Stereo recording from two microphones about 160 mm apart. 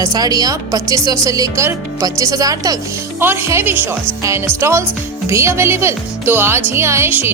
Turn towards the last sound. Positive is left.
turn(degrees=-15)  # may be behind; listen again after turning